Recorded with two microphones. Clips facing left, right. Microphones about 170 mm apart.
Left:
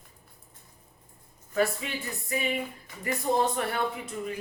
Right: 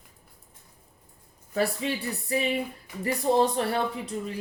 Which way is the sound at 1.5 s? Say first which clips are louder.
Right 1 dB; 35° right (ahead or behind).